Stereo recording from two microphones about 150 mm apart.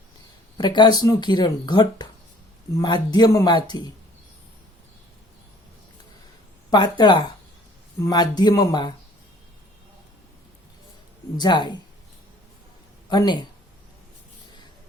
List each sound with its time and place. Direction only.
0.5 s speech: 30° left (ahead or behind)
6.7 s speech: 30° left (ahead or behind)
11.3 s speech: 30° left (ahead or behind)
13.1 s speech: 30° left (ahead or behind)